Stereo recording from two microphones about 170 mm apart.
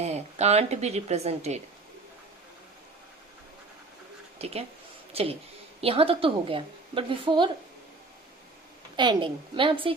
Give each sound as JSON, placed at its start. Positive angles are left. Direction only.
{"t": 0.0, "sound": "a woman's voice", "side_deg": -40}
{"t": 4.4, "sound": "a woman's voice", "side_deg": -35}
{"t": 9.0, "sound": "a woman's voice", "side_deg": -30}